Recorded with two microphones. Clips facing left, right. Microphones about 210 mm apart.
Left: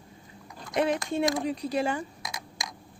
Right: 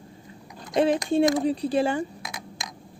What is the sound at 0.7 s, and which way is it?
Speech, 30° right (ahead or behind).